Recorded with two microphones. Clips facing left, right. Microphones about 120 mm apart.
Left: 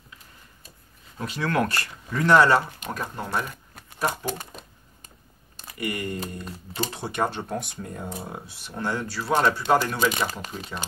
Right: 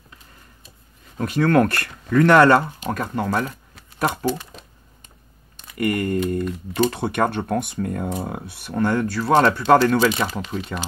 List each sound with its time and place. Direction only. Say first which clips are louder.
1.1 s speech: right 8 dB; 50° right (ahead or behind)
4.3 s typewriter: right 7 dB; 45° left (ahead or behind)
5.8 s speech: right 9 dB; 50° right (ahead or behind)